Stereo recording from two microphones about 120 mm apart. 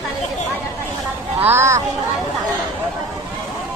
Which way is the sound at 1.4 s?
20° right (ahead or behind).